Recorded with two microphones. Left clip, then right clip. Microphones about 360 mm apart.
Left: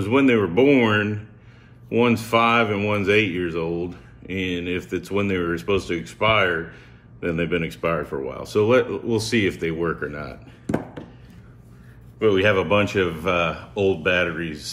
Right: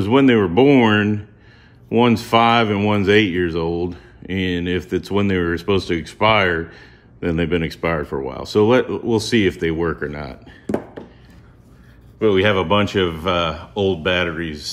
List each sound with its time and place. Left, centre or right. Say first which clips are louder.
0.0 s speech: right 4 dB; right
12.2 s speech: right 2 dB; right